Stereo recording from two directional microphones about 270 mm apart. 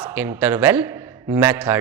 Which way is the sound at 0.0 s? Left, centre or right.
Centre.